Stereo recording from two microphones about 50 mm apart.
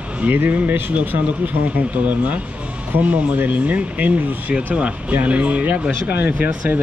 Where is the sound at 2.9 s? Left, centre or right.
Right.